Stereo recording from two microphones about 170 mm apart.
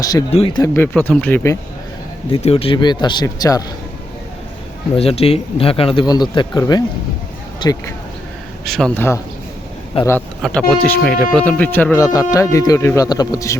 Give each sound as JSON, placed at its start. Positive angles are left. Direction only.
{"t": 0.0, "sound": "speech", "side_deg": 20}
{"t": 0.3, "sound": "speech", "side_deg": 35}
{"t": 0.6, "sound": "speech", "side_deg": 15}
{"t": 2.3, "sound": "speech", "side_deg": 35}
{"t": 4.9, "sound": "speech", "side_deg": 35}
{"t": 8.6, "sound": "speech", "side_deg": 0}
{"t": 9.0, "sound": "speech", "side_deg": 15}